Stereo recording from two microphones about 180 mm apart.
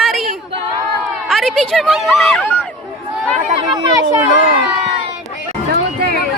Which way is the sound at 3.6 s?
25° right (ahead or behind).